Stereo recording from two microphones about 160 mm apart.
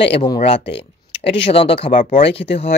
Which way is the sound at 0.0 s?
40° left (ahead or behind).